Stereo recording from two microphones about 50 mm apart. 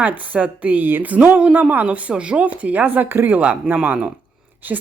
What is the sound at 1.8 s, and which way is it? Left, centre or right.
Speech, right.